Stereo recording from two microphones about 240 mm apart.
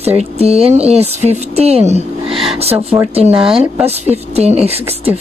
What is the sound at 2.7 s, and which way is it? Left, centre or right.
Speech, centre.